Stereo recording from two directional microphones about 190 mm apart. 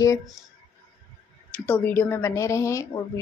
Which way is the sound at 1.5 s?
10° left (ahead or behind).